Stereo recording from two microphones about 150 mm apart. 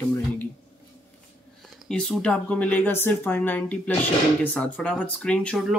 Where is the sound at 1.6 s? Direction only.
5° left (ahead or behind).